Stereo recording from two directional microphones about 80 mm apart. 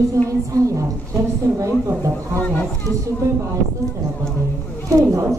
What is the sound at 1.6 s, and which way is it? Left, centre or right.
Speech, right.